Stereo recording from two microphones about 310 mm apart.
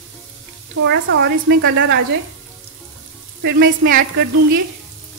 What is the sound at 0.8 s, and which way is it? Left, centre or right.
Speech, right.